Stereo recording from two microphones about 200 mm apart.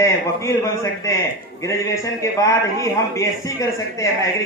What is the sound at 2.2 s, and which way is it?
A man's voice, 15° left (ahead or behind).